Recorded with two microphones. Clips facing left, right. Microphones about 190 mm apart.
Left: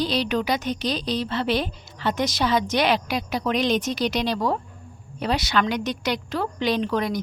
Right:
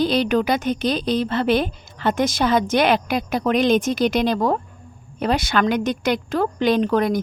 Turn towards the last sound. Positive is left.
turn(degrees=-50)  # may be behind; listen again after turning